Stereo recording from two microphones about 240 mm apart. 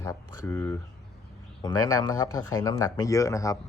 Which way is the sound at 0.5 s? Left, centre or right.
Centre.